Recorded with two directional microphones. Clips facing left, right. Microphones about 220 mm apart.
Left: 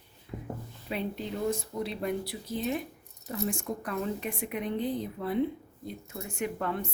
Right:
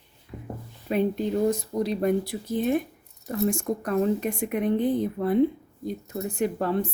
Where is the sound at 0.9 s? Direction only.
50° right (ahead or behind).